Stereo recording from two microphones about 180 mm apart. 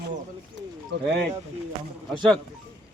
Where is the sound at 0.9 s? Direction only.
70° right (ahead or behind).